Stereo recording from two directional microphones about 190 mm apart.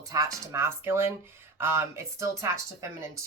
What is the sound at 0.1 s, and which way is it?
Speech, 15° right (ahead or behind).